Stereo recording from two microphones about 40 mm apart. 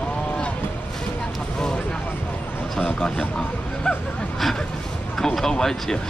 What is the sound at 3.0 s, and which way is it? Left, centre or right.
Speech, centre.